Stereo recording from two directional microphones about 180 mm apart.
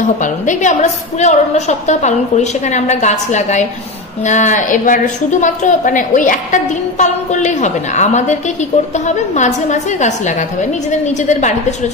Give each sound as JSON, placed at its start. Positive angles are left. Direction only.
{"t": 0.2, "sound": "a woman's voice", "side_deg": 45}